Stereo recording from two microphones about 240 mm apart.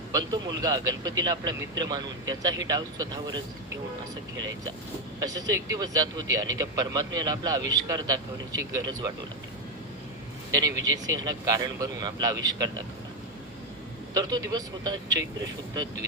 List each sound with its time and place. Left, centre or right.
0.1 s a man's voice: centre
5.2 s a man's voice: centre
10.5 s a man's voice: centre
14.1 s a man's voice: centre